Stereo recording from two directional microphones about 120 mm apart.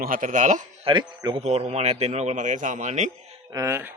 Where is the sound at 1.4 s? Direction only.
65° right (ahead or behind); by 3.1 s 85° right.